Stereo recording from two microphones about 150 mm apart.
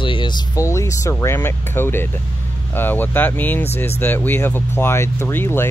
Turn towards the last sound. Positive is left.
turn(degrees=15)  # may be behind; listen again after turning